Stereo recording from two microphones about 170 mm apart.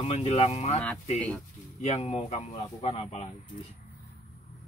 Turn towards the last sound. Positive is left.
turn(degrees=35)  # may be behind; listen again after turning